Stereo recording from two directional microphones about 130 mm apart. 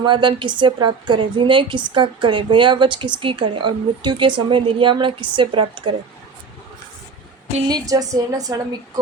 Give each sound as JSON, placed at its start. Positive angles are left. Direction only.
{"t": 0.0, "sound": "a woman's voice", "side_deg": -40}
{"t": 7.7, "sound": "a woman's voice", "side_deg": -30}